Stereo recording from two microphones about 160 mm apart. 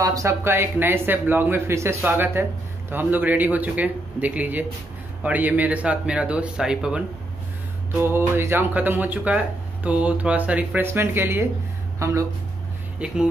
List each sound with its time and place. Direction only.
0.0 s speech: 20° right (ahead or behind); by 7.0 s 5° right (ahead or behind)
8.0 s speech: 15° right (ahead or behind)
13.0 s speech: 5° right (ahead or behind)